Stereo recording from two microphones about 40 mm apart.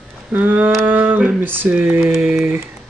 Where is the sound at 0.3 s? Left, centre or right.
Right.